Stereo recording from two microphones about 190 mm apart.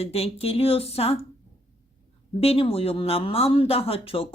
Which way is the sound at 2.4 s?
30° left (ahead or behind).